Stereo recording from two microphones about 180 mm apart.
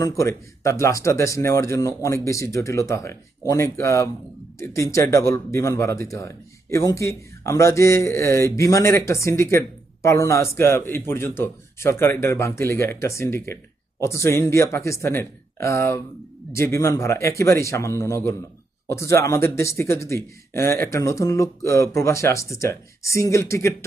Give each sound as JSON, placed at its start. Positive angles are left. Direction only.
{"t": 0.0, "sound": "speech", "side_deg": 15}